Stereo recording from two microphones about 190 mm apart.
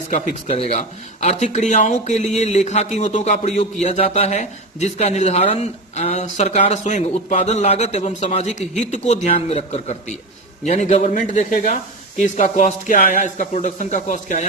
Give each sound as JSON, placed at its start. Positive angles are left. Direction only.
{"t": 0.1, "sound": "speech", "side_deg": 40}